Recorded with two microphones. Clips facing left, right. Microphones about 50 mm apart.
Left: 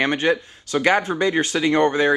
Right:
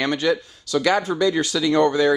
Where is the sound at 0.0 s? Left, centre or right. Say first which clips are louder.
Left 1 dB; left.